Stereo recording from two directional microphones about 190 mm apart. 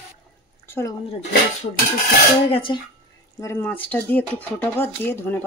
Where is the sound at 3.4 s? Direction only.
15° left (ahead or behind).